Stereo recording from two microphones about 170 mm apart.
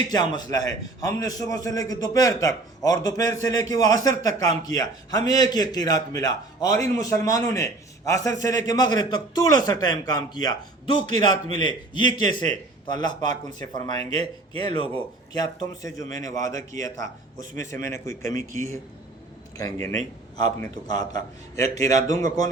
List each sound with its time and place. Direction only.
0.1 s a man's voice: 25° left (ahead or behind)
13.3 s speech: 45° right (ahead or behind)
13.7 s a man's voice: 25° left (ahead or behind)